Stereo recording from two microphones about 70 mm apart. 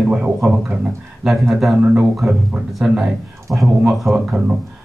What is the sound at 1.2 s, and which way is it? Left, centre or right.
Speech, centre.